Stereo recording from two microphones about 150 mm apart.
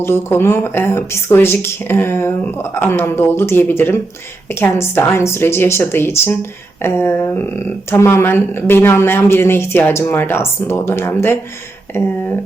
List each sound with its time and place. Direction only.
0.0 s speech: 15° left (ahead or behind)